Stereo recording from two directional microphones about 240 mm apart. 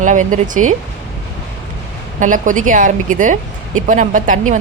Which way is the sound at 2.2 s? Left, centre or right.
Right.